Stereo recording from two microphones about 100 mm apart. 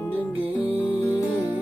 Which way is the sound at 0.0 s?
20° left (ahead or behind).